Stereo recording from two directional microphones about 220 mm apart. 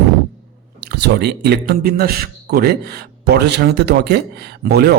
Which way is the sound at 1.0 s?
50° right (ahead or behind).